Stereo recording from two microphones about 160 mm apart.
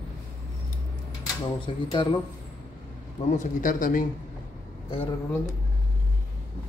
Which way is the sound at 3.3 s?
55° left (ahead or behind).